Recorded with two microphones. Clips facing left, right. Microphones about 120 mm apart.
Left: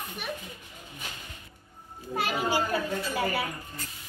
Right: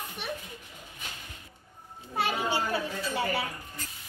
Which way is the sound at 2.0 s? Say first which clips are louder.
Even; 30° right (ahead or behind).